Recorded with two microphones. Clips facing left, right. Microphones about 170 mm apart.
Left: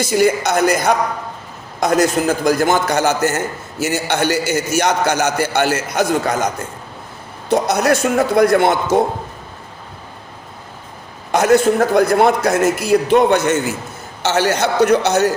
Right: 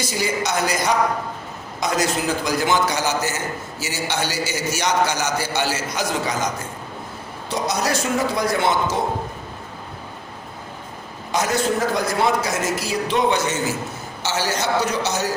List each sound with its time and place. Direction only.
0.0 s a man's voice: 55° left (ahead or behind)
7.5 s a man's voice: 55° left (ahead or behind)
11.3 s a man's voice: 60° left (ahead or behind)